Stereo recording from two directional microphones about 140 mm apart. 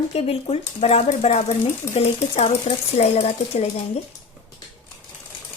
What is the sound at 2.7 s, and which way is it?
A woman's voice, 50° left (ahead or behind).